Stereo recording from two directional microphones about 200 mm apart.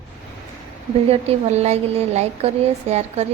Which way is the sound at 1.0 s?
30° right (ahead or behind).